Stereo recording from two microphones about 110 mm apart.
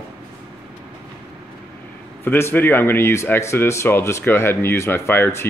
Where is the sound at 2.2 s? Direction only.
20° left (ahead or behind).